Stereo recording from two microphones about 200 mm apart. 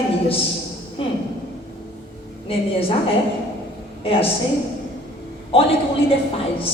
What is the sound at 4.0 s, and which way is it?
Speech, 30° left (ahead or behind).